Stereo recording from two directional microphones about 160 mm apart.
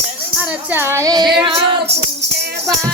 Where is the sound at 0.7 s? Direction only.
15° right (ahead or behind).